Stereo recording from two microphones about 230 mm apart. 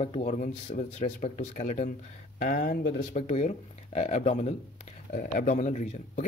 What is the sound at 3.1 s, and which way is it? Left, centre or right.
Speech, left.